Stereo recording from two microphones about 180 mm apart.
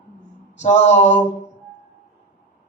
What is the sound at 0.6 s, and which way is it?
Speech, 40° left (ahead or behind).